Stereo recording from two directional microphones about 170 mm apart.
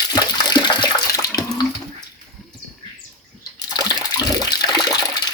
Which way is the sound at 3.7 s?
25° left (ahead or behind).